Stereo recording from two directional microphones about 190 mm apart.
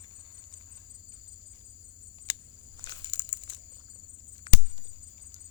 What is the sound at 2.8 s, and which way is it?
Crumpling, 25° left (ahead or behind).